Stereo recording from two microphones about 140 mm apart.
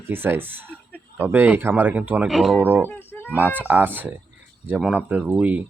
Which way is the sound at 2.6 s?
15° right (ahead or behind).